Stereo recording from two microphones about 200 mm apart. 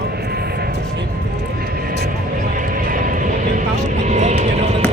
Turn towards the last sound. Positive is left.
turn(degrees=-35)  # may be behind; listen again after turning